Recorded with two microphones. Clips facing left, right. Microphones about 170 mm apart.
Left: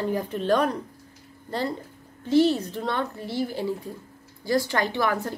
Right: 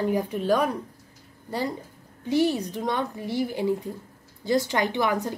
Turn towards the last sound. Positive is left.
turn(degrees=-15)  # may be behind; listen again after turning